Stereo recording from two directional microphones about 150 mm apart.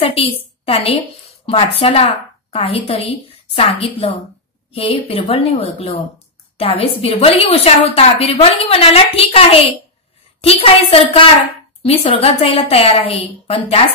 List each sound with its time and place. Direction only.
0.0 s a woman's voice: 40° left (ahead or behind)